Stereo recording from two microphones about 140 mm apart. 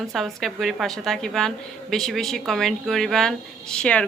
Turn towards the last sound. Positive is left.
turn(degrees=5)  # may be behind; listen again after turning